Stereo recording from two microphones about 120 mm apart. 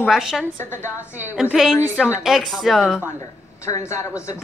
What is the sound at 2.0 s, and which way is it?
A woman's voice, 5° right (ahead or behind).